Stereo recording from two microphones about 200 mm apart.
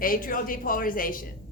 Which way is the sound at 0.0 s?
45° left (ahead or behind).